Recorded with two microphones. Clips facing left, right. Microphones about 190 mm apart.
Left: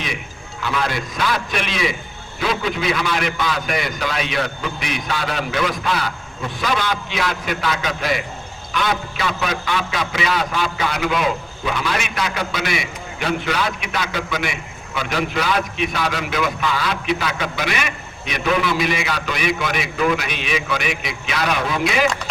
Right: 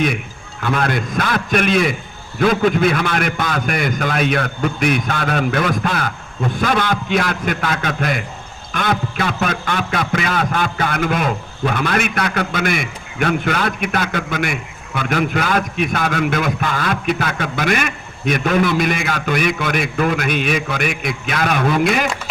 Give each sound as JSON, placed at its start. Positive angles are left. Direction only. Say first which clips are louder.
{"t": 0.6, "sound": "a man's voice", "louder": "right 4 dB", "side_deg": -50}